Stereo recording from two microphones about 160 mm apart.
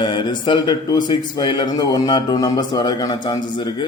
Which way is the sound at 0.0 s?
30° left (ahead or behind).